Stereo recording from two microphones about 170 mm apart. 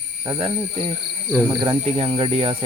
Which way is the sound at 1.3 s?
15° right (ahead or behind).